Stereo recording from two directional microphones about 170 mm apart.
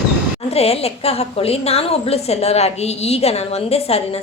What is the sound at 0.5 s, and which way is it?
A woman's voice, 35° left (ahead or behind).